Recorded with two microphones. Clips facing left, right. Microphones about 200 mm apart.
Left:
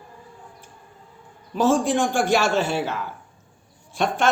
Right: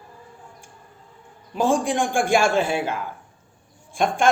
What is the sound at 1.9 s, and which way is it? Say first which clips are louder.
A man's voice: even; 55° right (ahead or behind).